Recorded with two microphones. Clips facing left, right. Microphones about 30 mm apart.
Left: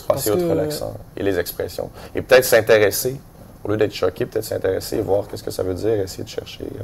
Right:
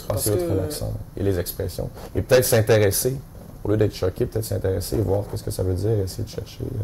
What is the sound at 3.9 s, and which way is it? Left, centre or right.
Speech, left.